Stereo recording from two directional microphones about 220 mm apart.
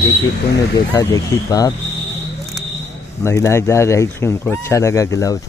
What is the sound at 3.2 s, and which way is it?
Speech, 15° left (ahead or behind).